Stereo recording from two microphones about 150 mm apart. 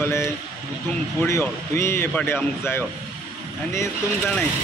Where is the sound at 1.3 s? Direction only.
15° left (ahead or behind).